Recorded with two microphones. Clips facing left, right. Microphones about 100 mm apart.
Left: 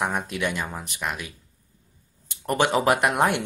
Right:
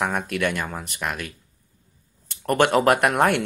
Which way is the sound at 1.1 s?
55° right (ahead or behind).